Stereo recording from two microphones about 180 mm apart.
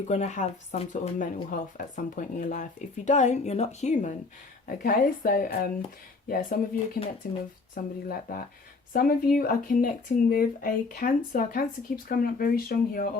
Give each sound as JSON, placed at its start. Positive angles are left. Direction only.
{"t": 0.1, "sound": "speech", "side_deg": 40}